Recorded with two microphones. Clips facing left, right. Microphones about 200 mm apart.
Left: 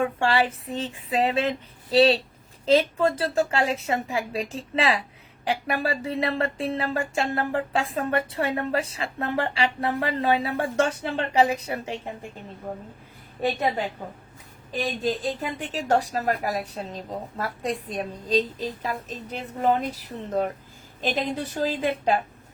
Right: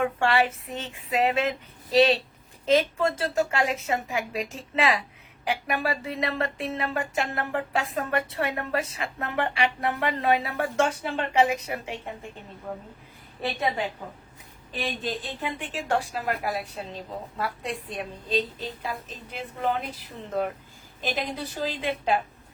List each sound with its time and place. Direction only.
0.0 s a woman's voice: 30° left (ahead or behind)
13.4 s a woman's voice: 40° left (ahead or behind)
21.6 s a woman's voice: 45° left (ahead or behind)